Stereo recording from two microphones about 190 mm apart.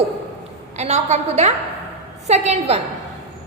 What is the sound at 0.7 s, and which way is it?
A woman's voice, 35° right (ahead or behind).